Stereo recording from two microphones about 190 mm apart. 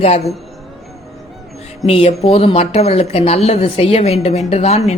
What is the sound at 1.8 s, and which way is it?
A woman's voice, 30° left (ahead or behind).